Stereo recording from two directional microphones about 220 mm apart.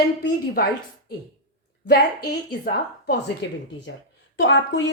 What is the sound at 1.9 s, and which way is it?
Speech, 45° left (ahead or behind).